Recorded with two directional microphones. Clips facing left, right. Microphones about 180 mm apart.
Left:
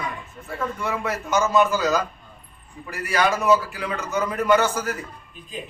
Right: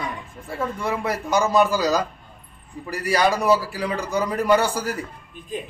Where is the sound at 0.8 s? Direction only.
35° right (ahead or behind).